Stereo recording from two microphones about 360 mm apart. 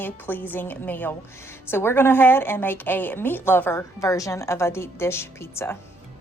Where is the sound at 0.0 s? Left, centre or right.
Centre.